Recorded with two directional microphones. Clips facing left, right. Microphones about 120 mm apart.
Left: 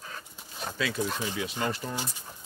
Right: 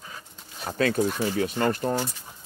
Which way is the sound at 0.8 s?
50° right (ahead or behind).